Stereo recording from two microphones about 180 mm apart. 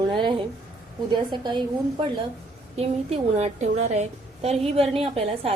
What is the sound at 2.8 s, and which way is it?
A woman's voice, 35° right (ahead or behind).